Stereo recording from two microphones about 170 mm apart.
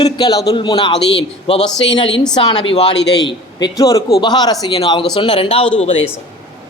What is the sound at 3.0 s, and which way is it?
Speech, 85° left.